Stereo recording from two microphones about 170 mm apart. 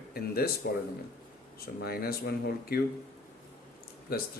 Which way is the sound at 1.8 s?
65° left (ahead or behind).